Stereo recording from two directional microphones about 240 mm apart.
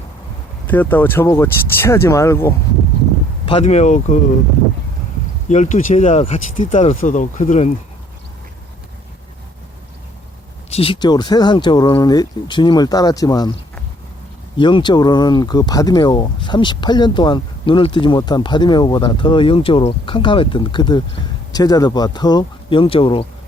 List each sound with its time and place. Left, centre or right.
0.7 s speech: centre
3.4 s speech: left
5.5 s speech: left
10.7 s speech: left
14.6 s speech: centre